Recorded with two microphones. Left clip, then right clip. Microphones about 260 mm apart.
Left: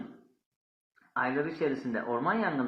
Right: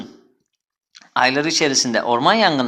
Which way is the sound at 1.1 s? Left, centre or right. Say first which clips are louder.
Right 14 dB; right.